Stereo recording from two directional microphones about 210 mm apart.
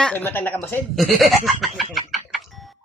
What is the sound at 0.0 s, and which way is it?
Speech, 5° left (ahead or behind).